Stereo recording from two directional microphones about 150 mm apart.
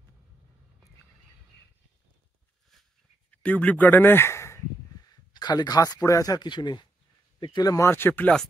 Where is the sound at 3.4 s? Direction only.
10° left (ahead or behind).